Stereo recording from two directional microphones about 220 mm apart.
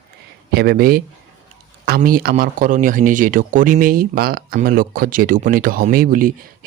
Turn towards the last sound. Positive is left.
turn(degrees=-40)  # may be behind; listen again after turning